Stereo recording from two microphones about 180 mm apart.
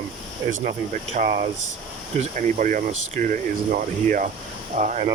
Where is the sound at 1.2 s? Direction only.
45° right (ahead or behind).